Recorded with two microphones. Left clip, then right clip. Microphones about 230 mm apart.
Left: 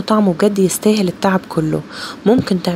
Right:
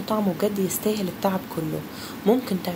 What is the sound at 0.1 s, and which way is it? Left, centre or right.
Speech, left.